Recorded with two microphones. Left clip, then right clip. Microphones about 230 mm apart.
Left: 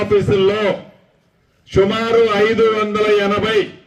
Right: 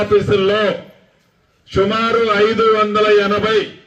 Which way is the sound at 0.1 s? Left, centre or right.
Left.